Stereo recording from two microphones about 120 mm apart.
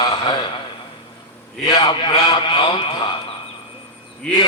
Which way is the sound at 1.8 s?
45° left (ahead or behind).